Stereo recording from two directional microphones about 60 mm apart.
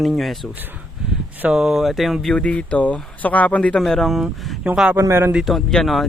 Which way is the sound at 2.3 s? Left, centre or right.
Left.